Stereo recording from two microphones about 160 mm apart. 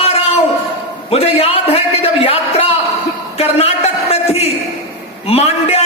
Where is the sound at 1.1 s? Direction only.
40° left (ahead or behind).